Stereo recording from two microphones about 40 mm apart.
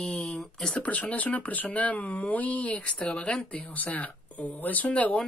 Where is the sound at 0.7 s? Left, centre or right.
Left.